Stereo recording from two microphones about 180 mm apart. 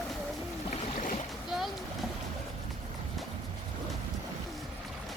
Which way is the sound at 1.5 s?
Centre (ahead or behind).